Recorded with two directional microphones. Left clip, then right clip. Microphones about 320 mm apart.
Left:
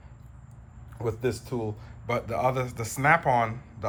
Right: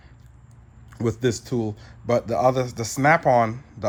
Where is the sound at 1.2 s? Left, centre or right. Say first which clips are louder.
Right 6 dB; right.